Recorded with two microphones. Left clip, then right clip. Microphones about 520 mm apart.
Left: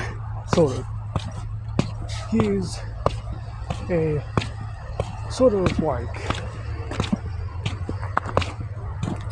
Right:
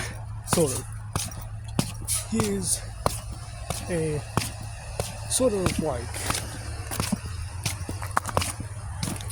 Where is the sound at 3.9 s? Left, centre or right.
Right.